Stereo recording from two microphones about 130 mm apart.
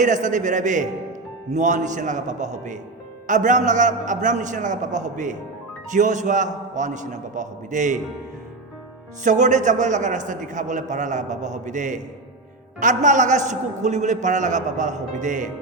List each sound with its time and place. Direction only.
0.0 s a man's voice: 75° right (ahead or behind)
9.2 s a man's voice: 70° right (ahead or behind)